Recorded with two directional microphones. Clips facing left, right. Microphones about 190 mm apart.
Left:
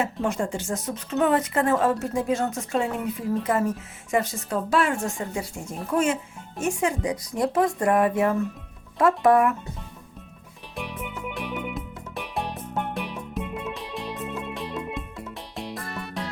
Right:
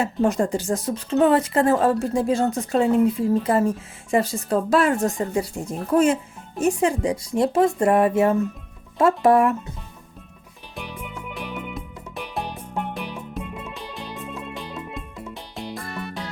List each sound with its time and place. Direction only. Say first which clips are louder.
0.0 s speech: right 5 dB; 35° right (ahead or behind)
10.8 s music: left 1 dB; centre (ahead or behind)